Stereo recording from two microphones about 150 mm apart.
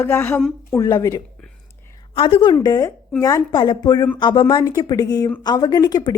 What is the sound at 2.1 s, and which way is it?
Speech, 35° left (ahead or behind).